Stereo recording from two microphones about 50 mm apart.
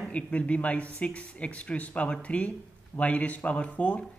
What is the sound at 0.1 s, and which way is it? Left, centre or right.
A man's voice, left.